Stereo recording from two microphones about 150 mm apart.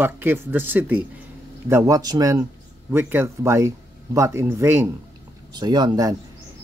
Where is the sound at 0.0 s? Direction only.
15° right (ahead or behind).